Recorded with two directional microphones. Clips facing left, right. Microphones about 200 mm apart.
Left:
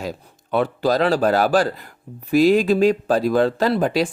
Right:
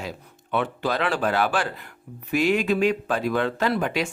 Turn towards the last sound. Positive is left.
turn(degrees=35)  # may be behind; listen again after turning